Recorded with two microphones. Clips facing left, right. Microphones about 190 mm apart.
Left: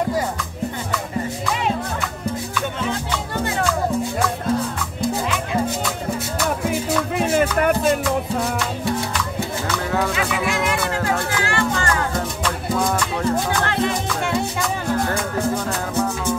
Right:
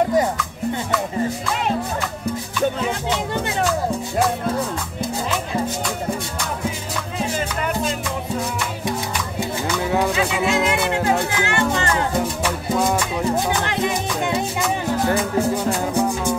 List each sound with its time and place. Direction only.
6.7 s music: 60° left (ahead or behind)
10.1 s music: 25° right (ahead or behind)